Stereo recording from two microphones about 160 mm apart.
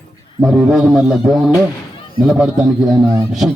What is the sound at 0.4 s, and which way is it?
A man's voice, centre (ahead or behind).